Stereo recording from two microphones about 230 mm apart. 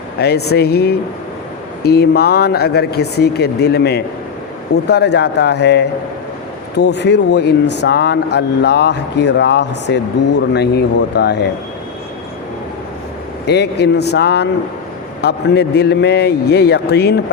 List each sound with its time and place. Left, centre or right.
0.2 s speech: left
13.5 s speech: left